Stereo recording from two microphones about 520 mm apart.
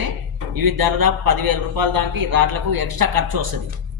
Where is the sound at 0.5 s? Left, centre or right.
Right.